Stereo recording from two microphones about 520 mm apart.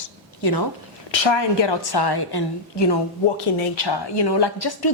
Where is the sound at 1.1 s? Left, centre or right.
Left.